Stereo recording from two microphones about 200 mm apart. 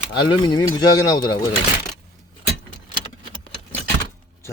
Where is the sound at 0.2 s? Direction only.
20° left (ahead or behind).